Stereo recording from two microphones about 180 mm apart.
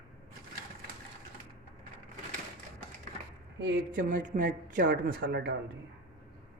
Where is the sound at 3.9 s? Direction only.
50° right (ahead or behind); by 5.5 s 65° right (ahead or behind).